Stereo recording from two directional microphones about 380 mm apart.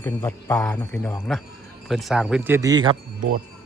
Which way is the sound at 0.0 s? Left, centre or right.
Centre.